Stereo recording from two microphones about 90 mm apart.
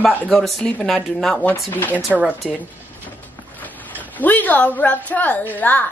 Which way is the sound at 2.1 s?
10° right (ahead or behind).